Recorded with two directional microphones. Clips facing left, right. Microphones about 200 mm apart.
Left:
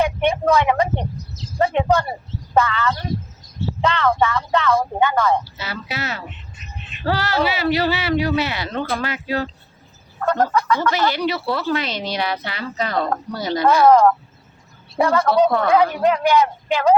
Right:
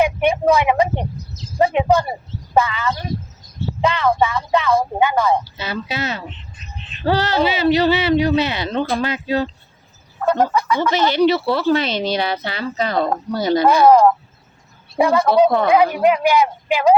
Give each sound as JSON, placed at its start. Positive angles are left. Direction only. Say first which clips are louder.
{"t": 0.0, "sound": "a woman's voice", "louder": "right 2 dB", "side_deg": -10}